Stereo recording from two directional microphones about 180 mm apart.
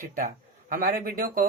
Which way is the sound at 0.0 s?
50° right (ahead or behind).